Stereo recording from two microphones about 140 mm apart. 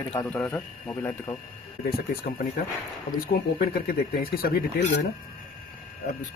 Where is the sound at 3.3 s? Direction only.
90° left.